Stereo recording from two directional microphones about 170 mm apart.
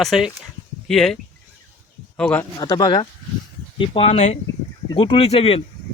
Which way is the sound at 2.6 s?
25° left (ahead or behind).